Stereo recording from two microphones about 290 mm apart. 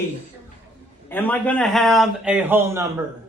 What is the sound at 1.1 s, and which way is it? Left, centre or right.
A man's voice, centre.